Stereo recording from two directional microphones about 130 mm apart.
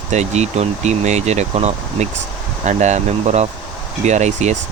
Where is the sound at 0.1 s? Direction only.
60° right (ahead or behind).